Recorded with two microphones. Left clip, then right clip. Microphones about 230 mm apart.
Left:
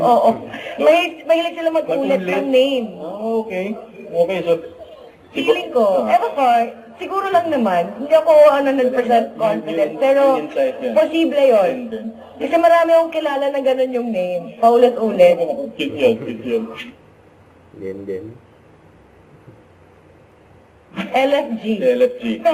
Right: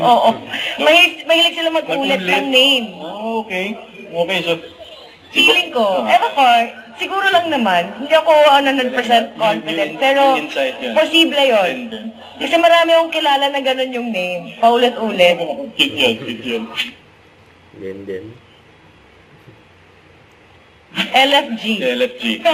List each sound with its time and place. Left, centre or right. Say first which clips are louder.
0.0 s a man's voice: right 1 dB; centre
2.5 s speech: right 2 dB; right
3.0 s a sound: left 1 dB; centre
4.2 s a man's voice: left 1 dB; centre
21.2 s a man's voice: right 3 dB; centre